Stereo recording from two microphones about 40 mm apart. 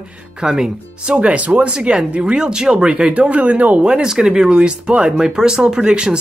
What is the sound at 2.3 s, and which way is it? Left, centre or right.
Speech, centre.